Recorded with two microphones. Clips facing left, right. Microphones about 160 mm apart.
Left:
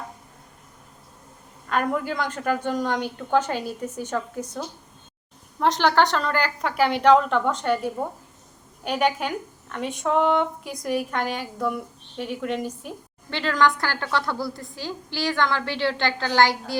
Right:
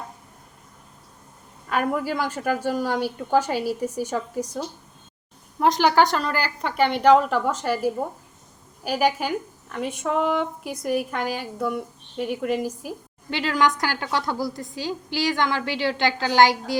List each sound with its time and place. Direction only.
1.7 s a woman's voice: 5° right (ahead or behind)
5.5 s a woman's voice: 10° right (ahead or behind)